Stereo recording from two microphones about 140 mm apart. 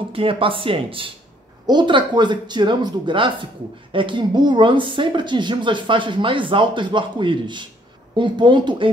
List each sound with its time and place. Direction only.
0.1 s speech: 40° right (ahead or behind)